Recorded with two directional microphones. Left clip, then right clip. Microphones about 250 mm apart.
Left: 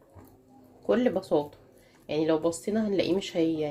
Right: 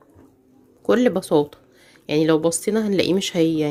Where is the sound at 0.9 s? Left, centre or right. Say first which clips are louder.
Right 7 dB; right.